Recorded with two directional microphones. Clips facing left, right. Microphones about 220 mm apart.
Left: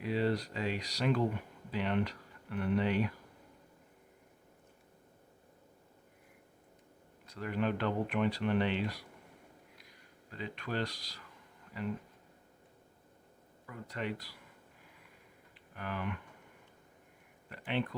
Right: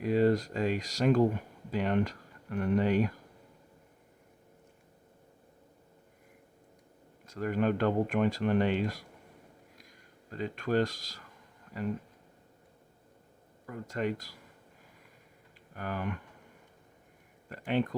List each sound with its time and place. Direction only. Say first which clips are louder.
0.0 s speech: right 7 dB; 45° right (ahead or behind)
7.3 s speech: right 5 dB; 45° right (ahead or behind)
10.3 s speech: right 8 dB; 45° right (ahead or behind)
13.7 s speech: right 6 dB; 45° right (ahead or behind)
15.7 s speech: right 3 dB; 45° right (ahead or behind)
17.7 s speech: right 5 dB; 45° right (ahead or behind)